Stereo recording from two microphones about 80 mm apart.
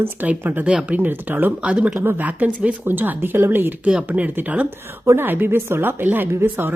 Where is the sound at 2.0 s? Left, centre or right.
Right.